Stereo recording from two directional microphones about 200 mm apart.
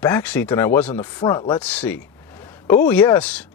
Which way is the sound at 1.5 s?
5° left (ahead or behind).